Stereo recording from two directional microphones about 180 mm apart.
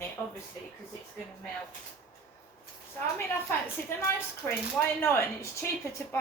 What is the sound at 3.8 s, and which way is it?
Speech, 10° left (ahead or behind).